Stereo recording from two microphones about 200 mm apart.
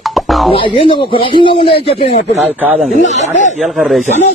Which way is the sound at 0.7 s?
25° left (ahead or behind).